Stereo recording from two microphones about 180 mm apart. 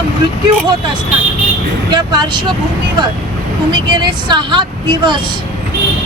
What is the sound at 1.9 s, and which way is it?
Speech, 25° right (ahead or behind).